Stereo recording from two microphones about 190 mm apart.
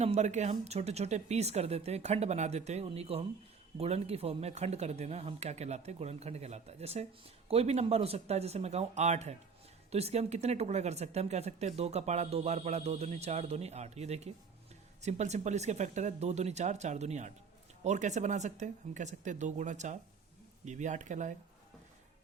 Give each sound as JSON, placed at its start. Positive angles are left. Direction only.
{"t": 0.0, "sound": "speech", "side_deg": -35}